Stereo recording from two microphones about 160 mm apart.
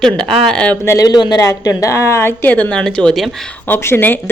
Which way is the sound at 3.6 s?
15° left (ahead or behind).